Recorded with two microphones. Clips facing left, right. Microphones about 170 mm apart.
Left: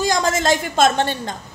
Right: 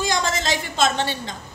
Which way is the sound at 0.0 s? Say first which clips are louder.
Left 5 dB; 45° left (ahead or behind).